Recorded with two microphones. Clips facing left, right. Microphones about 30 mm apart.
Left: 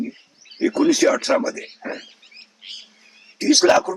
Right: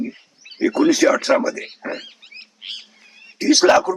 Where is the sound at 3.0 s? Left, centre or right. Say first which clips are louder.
Right 4 dB; right.